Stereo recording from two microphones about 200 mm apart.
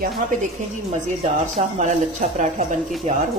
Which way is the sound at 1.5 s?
35° right (ahead or behind).